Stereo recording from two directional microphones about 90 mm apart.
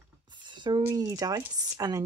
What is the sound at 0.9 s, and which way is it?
Speech, 40° right (ahead or behind).